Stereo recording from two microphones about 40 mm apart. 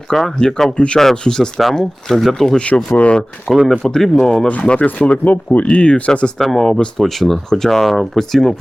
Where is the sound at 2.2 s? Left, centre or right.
Centre.